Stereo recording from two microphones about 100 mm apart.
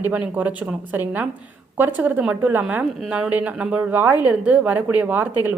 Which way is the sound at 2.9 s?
5° right (ahead or behind).